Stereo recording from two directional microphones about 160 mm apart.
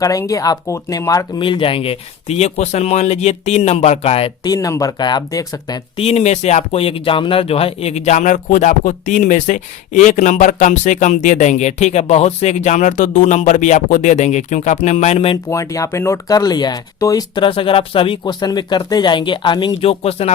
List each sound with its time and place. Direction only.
0.0 s speech: 20° left (ahead or behind)
1.4 s speech: 30° left (ahead or behind)
4.4 s speech: 20° left (ahead or behind)
6.0 s speech: 40° left (ahead or behind)
15.4 s speech: 20° left (ahead or behind); by 20.3 s 40° left (ahead or behind)